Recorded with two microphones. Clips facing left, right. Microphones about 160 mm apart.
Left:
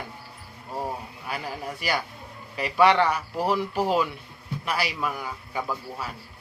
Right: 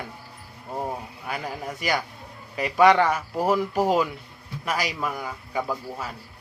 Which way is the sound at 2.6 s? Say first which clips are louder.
Right 2 dB; 40° right (ahead or behind).